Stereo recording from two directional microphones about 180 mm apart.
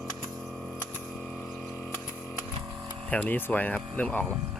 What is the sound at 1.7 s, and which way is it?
Chainsaw, 10° left (ahead or behind).